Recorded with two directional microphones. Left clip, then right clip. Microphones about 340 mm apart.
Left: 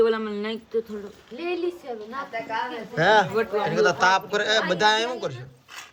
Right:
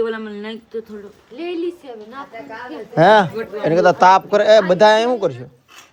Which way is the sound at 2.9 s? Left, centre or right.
Centre.